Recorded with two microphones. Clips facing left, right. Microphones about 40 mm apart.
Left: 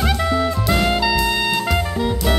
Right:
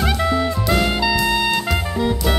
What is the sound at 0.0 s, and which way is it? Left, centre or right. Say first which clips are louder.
Music: even; centre.